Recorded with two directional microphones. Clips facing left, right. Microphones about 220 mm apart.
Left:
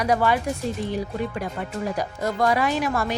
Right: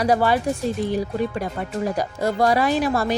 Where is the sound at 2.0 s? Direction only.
35° right (ahead or behind).